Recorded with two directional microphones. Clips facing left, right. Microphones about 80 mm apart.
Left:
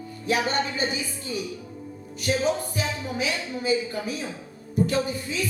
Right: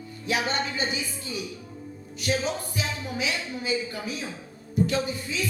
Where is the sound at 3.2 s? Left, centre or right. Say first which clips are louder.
Left 2 dB; left.